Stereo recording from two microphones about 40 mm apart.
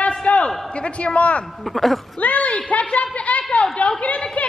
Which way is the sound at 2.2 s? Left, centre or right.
Left.